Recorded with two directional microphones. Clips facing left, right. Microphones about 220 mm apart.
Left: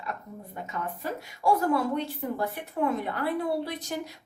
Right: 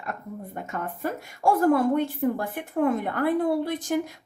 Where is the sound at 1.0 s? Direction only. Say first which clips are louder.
Right 2 dB; 50° right (ahead or behind).